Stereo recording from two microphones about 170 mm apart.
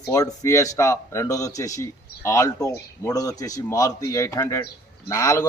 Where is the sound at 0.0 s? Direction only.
20° left (ahead or behind).